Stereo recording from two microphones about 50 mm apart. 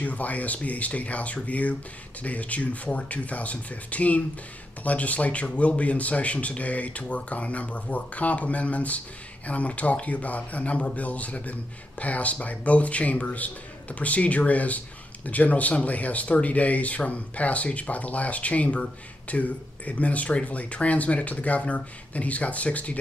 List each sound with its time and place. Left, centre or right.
0.0 s speech: left